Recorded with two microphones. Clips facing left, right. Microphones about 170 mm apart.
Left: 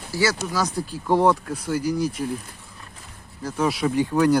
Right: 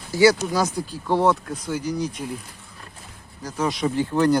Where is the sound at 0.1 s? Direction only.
20° right (ahead or behind).